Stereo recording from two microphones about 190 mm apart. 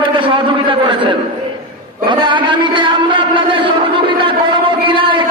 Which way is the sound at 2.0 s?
25° right (ahead or behind).